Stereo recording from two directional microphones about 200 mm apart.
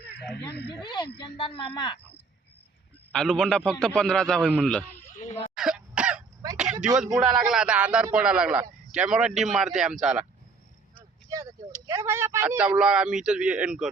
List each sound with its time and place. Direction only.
0.5 s speech: 55° left (ahead or behind)
0.8 s speech: 20° left (ahead or behind)
3.1 s a man's voice: 5° left (ahead or behind)
5.1 s a sound: 35° left (ahead or behind)
5.5 s cough: 5° right (ahead or behind)
6.4 s a sound: 20° right (ahead or behind)
6.8 s a man's voice: 5° right (ahead or behind)
11.3 s vehicle: 15° right (ahead or behind)
11.9 s a man's voice: 15° right (ahead or behind)